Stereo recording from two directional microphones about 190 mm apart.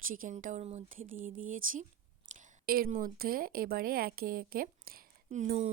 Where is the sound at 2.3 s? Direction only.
45° right (ahead or behind).